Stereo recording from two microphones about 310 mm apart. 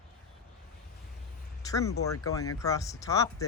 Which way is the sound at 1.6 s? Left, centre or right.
Centre.